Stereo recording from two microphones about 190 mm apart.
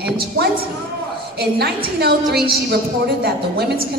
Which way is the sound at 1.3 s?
60° right (ahead or behind).